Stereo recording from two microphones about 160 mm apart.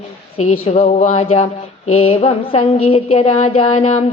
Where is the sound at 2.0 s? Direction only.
35° left (ahead or behind).